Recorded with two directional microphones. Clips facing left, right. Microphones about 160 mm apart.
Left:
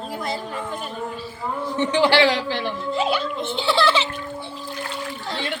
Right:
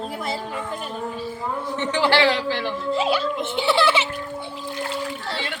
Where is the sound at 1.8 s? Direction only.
15° left (ahead or behind).